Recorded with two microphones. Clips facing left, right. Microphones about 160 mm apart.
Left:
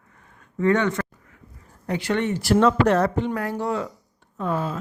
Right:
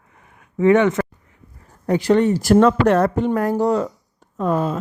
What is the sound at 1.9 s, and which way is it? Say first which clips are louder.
Speech: right 8 dB; 40° right (ahead or behind).